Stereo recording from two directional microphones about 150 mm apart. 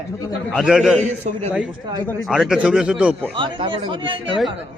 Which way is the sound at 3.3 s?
35° right (ahead or behind).